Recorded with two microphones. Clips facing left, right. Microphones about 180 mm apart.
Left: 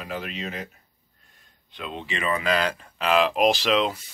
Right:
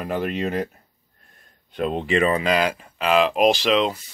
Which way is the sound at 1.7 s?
50° right (ahead or behind).